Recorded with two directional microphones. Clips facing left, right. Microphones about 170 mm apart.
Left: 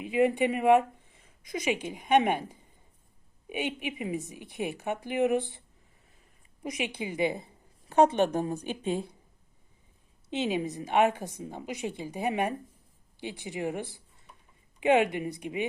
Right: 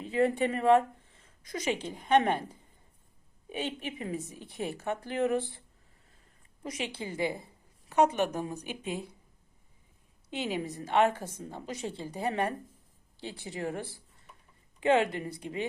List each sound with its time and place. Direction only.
0.0 s a woman's voice: 15° left (ahead or behind); by 9.0 s 30° left (ahead or behind)
10.2 s a woman's voice: 20° left (ahead or behind)